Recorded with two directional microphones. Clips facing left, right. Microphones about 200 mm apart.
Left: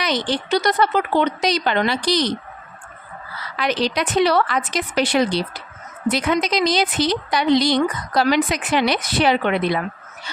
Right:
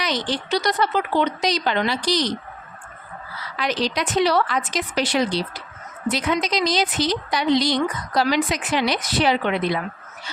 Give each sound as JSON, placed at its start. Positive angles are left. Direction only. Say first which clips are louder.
{"t": 0.0, "sound": "a woman's voice", "louder": "left 3 dB", "side_deg": 60}
{"t": 3.6, "sound": "a woman's voice", "louder": "left 2 dB", "side_deg": 60}